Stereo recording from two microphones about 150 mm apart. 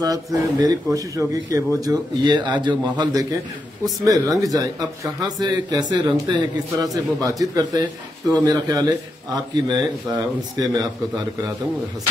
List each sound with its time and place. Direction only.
0.0 s speech: 25° right (ahead or behind)